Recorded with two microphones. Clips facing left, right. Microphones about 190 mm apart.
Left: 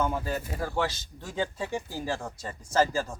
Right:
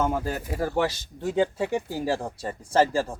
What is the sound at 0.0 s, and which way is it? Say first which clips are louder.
Speech: right 3 dB; 45° right (ahead or behind).